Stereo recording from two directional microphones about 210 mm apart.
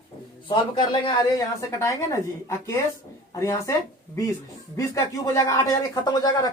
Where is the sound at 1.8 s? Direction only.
15° left (ahead or behind).